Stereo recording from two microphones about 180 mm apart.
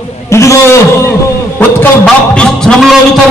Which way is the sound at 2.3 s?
5° left (ahead or behind).